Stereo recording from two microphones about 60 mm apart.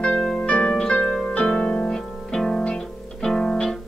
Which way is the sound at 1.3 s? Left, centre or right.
Centre.